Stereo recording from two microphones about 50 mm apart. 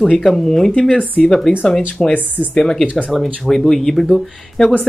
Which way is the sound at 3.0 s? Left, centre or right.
Centre.